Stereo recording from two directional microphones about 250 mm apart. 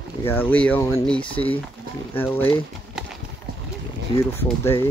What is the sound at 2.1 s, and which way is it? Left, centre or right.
Speech, centre.